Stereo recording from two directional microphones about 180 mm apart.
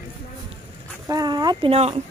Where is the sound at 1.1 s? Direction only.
20° right (ahead or behind).